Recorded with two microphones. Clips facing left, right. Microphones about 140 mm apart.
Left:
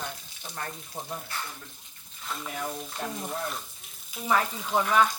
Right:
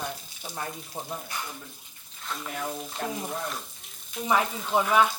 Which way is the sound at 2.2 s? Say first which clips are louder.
Right 1 dB; centre (ahead or behind).